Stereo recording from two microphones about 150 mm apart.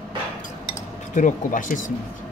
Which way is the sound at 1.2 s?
60° left (ahead or behind).